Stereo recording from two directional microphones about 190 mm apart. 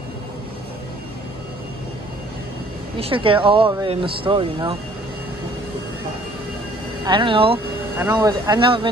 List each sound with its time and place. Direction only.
3.0 s speech: 25° right (ahead or behind)
7.1 s speech: 25° right (ahead or behind)